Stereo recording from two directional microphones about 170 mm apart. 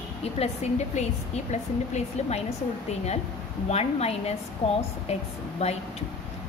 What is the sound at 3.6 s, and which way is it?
A woman's voice, 40° left (ahead or behind).